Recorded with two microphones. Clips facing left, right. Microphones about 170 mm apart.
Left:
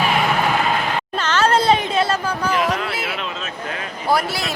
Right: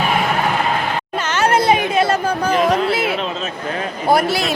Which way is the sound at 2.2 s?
45° right (ahead or behind).